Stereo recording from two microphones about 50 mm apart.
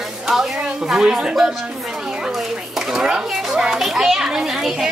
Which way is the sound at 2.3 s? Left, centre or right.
Centre.